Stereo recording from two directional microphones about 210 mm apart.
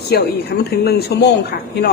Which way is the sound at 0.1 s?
50° left (ahead or behind).